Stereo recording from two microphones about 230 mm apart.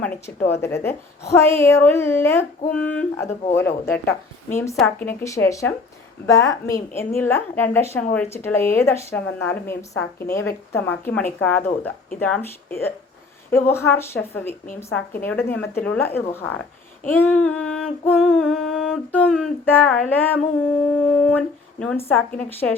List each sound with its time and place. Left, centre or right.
0.0 s a woman's voice: centre
3.7 s speech: left
4.0 s a woman's voice: centre
13.5 s a woman's voice: centre
17.1 s a sound: centre
20.1 s a woman's voice: centre
20.6 s a sound: centre
22.1 s a woman's voice: centre